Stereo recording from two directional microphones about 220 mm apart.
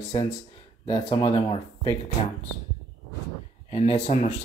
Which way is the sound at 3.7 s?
30° left (ahead or behind).